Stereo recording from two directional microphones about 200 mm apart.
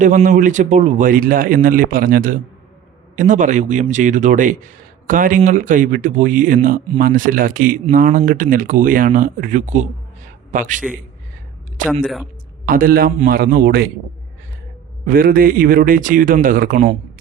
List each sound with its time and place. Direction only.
0.0 s speech: 40° right (ahead or behind)
12.6 s speech: 45° right (ahead or behind)
15.0 s speech: 45° right (ahead or behind)